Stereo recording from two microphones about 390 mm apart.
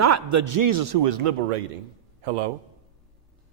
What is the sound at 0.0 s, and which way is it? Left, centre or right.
A man's voice, right.